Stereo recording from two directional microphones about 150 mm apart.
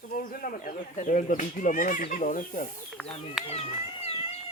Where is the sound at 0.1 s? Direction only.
70° left (ahead or behind).